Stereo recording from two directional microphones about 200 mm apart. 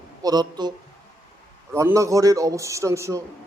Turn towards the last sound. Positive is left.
turn(degrees=-15)  # may be behind; listen again after turning